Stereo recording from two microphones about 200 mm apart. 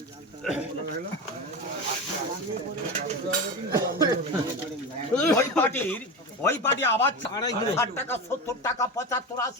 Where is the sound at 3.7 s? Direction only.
20° right (ahead or behind).